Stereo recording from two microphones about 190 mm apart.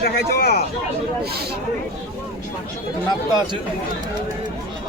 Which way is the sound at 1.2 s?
55° right (ahead or behind).